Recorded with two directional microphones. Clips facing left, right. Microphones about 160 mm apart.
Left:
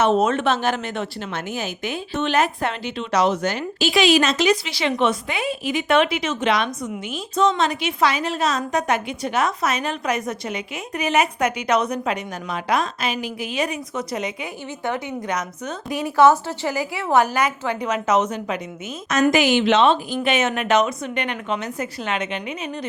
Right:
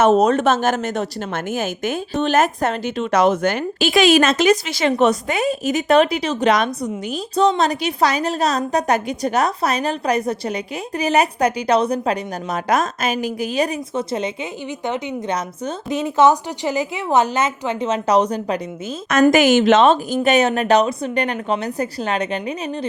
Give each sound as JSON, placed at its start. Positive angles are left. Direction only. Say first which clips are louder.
{"t": 0.0, "sound": "a woman's voice", "louder": "right 4 dB", "side_deg": -40}
{"t": 19.3, "sound": "a woman's voice", "louder": "right 4 dB", "side_deg": -45}